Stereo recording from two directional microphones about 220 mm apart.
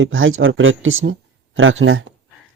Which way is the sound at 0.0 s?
60° right (ahead or behind).